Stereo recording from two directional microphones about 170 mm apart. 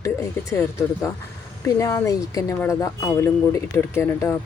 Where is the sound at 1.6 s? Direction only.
20° left (ahead or behind).